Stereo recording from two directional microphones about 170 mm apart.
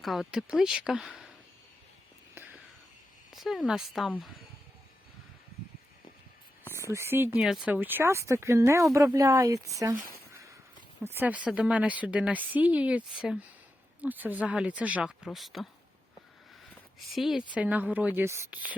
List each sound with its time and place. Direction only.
0.0 s speech: centre (ahead or behind)
2.3 s a sound: 10° right (ahead or behind)
3.3 s speech: centre (ahead or behind)
6.7 s a woman's voice: 15° right (ahead or behind)
7.3 s a woman's voice: 5° right (ahead or behind)
9.7 s a sound: 20° right (ahead or behind)
11.0 s a woman's voice: 10° right (ahead or behind)
17.1 s a woman's voice: centre (ahead or behind)